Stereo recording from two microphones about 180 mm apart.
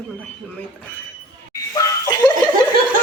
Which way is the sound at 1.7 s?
15° left (ahead or behind).